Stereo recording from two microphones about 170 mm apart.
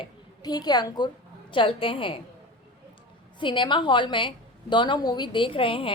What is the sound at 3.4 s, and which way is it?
A woman's voice, 30° left (ahead or behind).